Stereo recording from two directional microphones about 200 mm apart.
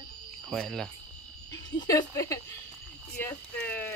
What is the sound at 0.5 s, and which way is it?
Cricket, centre (ahead or behind).